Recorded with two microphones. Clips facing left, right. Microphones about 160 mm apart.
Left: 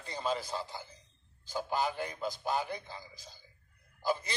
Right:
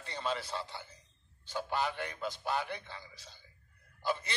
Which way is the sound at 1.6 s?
40° left (ahead or behind).